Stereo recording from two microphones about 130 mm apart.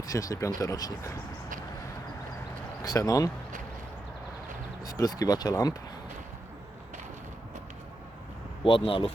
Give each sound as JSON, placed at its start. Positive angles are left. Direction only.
{"t": 0.1, "sound": "speech", "side_deg": 25}
{"t": 2.8, "sound": "speech", "side_deg": 30}
{"t": 4.8, "sound": "speech", "side_deg": 30}
{"t": 8.6, "sound": "speech", "side_deg": 45}